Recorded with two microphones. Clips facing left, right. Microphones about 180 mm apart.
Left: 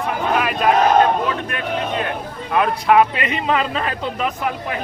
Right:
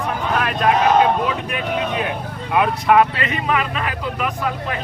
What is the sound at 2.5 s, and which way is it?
Speech, centre (ahead or behind).